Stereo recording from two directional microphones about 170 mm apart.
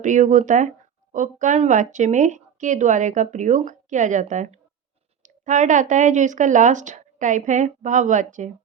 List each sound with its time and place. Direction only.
0.0 s speech: 50° right (ahead or behind)